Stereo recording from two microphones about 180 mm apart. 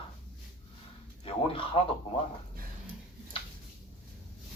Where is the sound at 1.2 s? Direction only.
30° left (ahead or behind).